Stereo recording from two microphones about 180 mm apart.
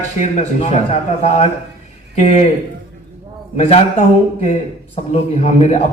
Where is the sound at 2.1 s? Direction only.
40° left (ahead or behind).